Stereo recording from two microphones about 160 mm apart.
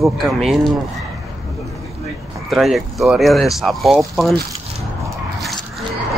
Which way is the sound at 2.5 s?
Centre (ahead or behind).